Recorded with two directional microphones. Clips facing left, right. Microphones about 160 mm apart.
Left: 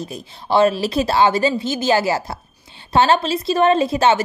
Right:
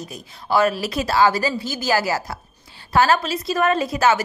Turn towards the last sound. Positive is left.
turn(degrees=25)  # may be behind; listen again after turning